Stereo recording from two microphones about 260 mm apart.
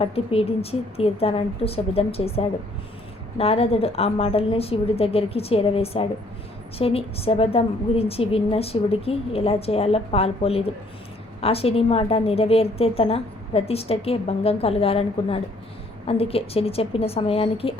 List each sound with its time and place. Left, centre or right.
0.0 s a woman's voice: left